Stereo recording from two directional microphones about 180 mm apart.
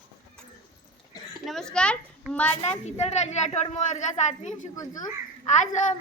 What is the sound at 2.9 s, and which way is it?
Speech, 35° left (ahead or behind).